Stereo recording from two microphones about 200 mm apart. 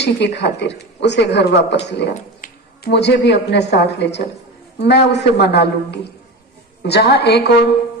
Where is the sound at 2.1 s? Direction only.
45° left (ahead or behind).